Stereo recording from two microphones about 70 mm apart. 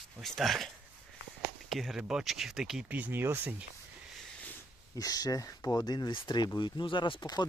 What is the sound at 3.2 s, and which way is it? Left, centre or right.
Speech, right.